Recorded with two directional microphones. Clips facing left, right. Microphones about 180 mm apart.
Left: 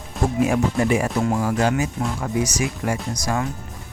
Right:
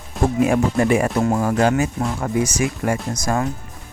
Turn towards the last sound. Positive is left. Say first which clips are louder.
# right 3 dB
turn(degrees=-50)  # may be behind; listen again after turning